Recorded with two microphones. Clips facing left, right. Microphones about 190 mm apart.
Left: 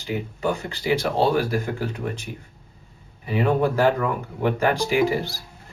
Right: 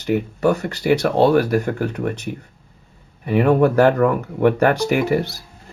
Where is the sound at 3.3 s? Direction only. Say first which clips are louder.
Right 6 dB; 60° right (ahead or behind).